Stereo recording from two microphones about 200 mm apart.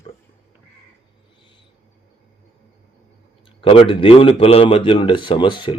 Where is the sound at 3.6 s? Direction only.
25° left (ahead or behind).